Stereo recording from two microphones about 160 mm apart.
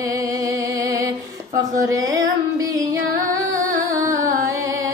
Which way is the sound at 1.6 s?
20° right (ahead or behind).